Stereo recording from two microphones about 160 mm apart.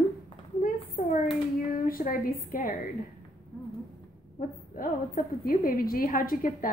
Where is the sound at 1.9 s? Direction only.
60° left (ahead or behind).